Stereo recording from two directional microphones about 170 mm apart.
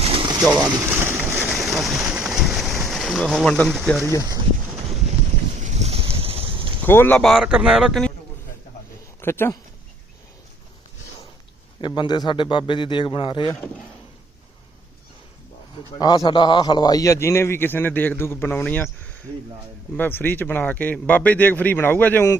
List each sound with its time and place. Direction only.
0.0 s a sound: 35° right (ahead or behind)
0.5 s speech: 20° right (ahead or behind)
0.9 s boat: 10° right (ahead or behind)
1.5 s rain: centre (ahead or behind)
4.3 s a sound: 20° right (ahead or behind)
5.5 s boat: 45° right (ahead or behind)
6.8 s speech: 10° left (ahead or behind)
9.2 s a man's voice: 15° left (ahead or behind)
11.8 s a man's voice: 25° left (ahead or behind)
16.0 s a man's voice: 25° left (ahead or behind)
20.0 s a man's voice: 10° left (ahead or behind)